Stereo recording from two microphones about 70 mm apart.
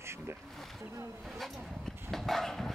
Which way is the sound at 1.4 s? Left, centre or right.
Centre.